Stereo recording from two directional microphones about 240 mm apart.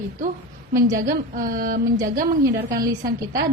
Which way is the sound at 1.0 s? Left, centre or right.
Right.